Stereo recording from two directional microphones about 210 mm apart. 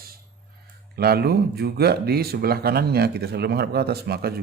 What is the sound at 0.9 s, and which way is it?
Speech, 50° right (ahead or behind).